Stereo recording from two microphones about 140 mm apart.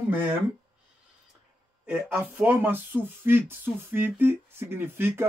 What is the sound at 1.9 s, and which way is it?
Speech, 10° right (ahead or behind).